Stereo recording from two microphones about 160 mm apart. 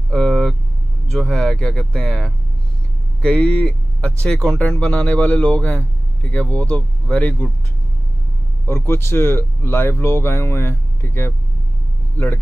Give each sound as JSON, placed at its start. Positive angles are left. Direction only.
{"t": 0.1, "sound": "speech", "side_deg": 5}
{"t": 8.6, "sound": "speech", "side_deg": 15}